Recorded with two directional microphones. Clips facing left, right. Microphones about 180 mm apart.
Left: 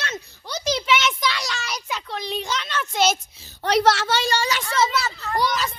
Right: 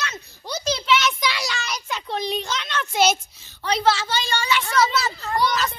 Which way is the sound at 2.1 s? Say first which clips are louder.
Right 6 dB; 20° right (ahead or behind).